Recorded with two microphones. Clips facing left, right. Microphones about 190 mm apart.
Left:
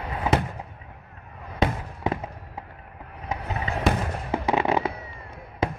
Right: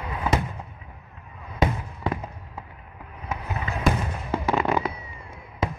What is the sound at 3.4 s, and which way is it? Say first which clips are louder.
Fireworks: even; 30° left (ahead or behind).